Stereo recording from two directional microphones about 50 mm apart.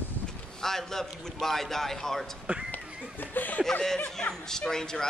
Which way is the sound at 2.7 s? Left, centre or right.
Left.